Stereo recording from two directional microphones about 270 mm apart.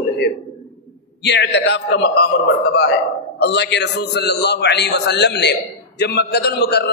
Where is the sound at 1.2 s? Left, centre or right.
Left.